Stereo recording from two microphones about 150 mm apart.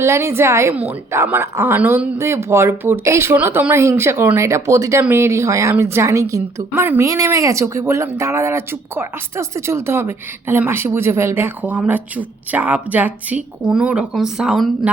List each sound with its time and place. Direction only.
0.0 s speech: 15° right (ahead or behind)